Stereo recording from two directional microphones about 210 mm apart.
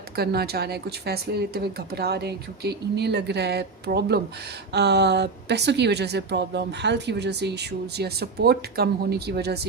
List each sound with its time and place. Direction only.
0.2 s a woman's voice: 50° right (ahead or behind)